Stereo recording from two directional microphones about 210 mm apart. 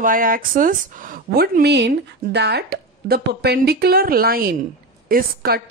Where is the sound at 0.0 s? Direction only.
40° right (ahead or behind).